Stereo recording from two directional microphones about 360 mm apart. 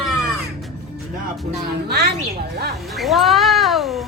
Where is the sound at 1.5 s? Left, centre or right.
Right.